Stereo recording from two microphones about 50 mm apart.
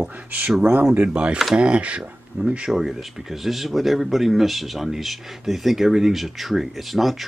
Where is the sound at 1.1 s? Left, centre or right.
Right.